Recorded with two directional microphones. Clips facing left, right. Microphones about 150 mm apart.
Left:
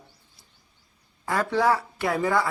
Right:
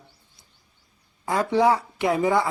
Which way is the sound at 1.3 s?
20° right (ahead or behind).